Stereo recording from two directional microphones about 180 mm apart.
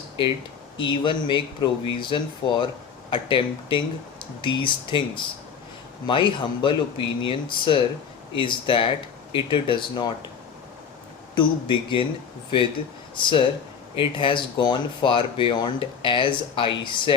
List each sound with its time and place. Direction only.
0.8 s speech: 25° left (ahead or behind)
11.3 s speech: 25° left (ahead or behind)
13.1 s speech: 30° left (ahead or behind)